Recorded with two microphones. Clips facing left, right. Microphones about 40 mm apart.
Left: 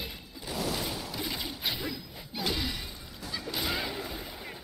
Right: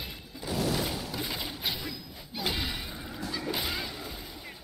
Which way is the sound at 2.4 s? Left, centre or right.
Centre.